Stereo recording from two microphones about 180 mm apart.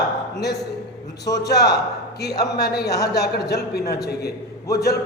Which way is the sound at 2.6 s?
65° left (ahead or behind).